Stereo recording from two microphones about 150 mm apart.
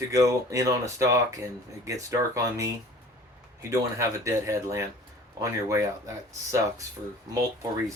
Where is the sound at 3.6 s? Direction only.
20° right (ahead or behind).